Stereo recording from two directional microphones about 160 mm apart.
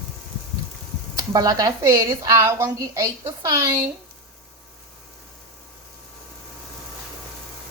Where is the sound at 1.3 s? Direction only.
25° right (ahead or behind).